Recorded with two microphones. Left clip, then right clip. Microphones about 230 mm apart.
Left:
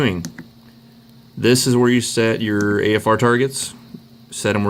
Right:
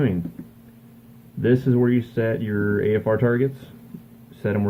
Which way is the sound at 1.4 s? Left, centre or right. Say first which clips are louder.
Left 5 dB; left.